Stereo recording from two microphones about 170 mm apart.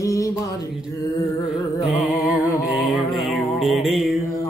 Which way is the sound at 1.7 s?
20° left (ahead or behind).